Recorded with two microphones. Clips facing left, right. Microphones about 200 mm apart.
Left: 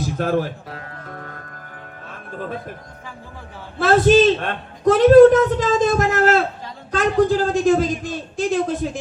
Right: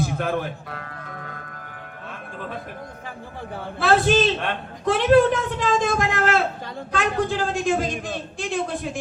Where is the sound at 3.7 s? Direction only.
45° left (ahead or behind).